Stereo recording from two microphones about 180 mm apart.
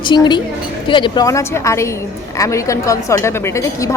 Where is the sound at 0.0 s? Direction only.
25° left (ahead or behind).